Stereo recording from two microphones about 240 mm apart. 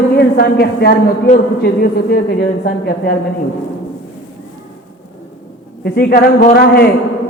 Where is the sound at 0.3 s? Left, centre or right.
Left.